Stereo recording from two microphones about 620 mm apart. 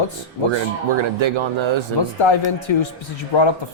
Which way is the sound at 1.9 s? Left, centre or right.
Left.